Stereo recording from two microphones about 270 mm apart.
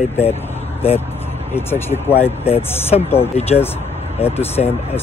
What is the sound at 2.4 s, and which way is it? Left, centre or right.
Speech, left.